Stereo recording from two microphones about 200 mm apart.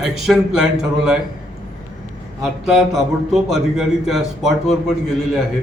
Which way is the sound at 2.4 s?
Centre (ahead or behind).